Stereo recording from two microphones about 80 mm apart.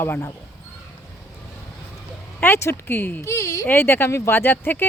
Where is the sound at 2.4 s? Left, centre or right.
Left.